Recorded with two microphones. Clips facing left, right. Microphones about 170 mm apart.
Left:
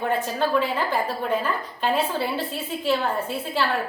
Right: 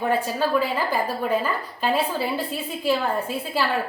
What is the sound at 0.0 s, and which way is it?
A woman's voice, 10° right (ahead or behind).